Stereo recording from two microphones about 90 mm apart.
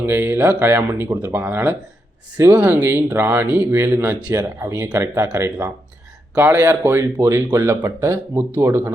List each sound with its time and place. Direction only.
0.0 s speech: 25° right (ahead or behind)